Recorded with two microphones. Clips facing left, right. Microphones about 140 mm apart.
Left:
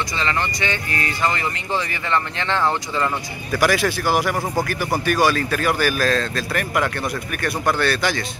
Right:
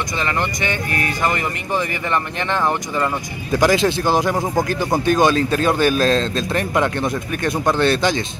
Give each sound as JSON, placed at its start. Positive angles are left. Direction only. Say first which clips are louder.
{"t": 0.2, "sound": "speech", "louder": "right 2 dB", "side_deg": -15}
{"t": 2.5, "sound": "speech", "louder": "right 1 dB", "side_deg": -15}